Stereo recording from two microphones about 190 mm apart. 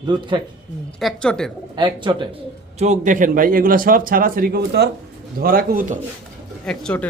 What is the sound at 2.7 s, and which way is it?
A man's voice, 35° right (ahead or behind).